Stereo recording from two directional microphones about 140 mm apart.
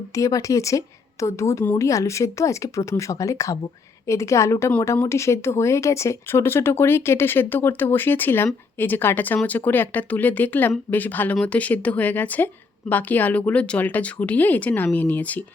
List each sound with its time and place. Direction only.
0.1 s speech: 25° left (ahead or behind)